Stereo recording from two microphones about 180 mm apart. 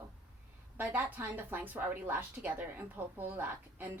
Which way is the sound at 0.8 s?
10° right (ahead or behind).